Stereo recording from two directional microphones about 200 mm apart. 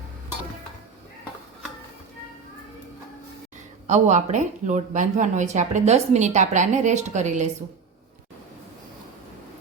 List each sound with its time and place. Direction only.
3.8 s a woman's voice: 35° right (ahead or behind)